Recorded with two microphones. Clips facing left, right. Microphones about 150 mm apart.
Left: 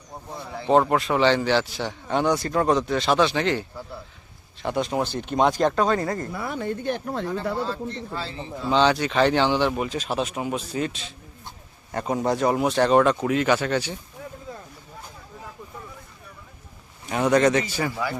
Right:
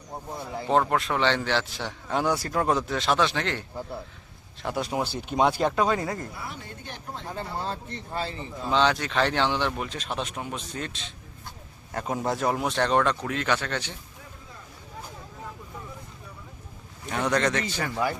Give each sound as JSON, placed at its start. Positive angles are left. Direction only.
{"t": 0.7, "sound": "a man's voice", "side_deg": 5}
{"t": 6.3, "sound": "speech", "side_deg": 55}
{"t": 8.7, "sound": "a man's voice", "side_deg": 0}
{"t": 17.1, "sound": "a man's voice", "side_deg": 10}